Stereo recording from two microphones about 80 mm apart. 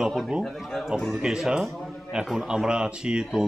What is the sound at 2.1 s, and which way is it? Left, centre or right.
Speech, centre.